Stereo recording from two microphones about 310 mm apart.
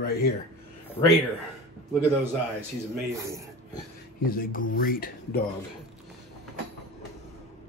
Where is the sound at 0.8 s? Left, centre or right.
Centre.